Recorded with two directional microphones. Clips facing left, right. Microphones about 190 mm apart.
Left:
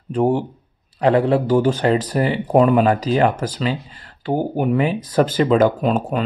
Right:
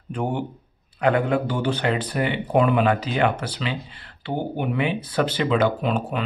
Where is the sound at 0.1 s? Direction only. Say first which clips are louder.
Left 8 dB; 35° left (ahead or behind).